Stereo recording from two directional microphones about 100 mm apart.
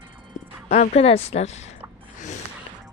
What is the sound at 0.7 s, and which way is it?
Speech, 90° left.